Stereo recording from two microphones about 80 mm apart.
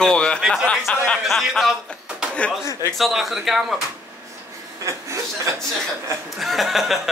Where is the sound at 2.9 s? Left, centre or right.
Centre.